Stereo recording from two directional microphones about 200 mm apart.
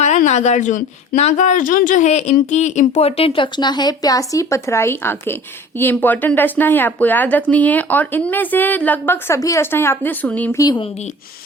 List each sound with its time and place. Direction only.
0.0 s speech: 35° left (ahead or behind); by 10.6 s 10° left (ahead or behind)
10.6 s speech: 20° left (ahead or behind)